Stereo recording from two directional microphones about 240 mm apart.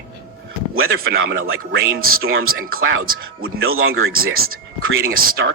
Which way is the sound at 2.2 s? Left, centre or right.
Right.